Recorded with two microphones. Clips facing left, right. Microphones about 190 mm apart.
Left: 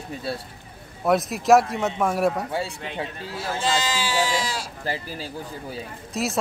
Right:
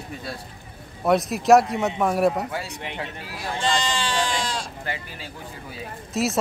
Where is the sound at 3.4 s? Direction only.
5° left (ahead or behind).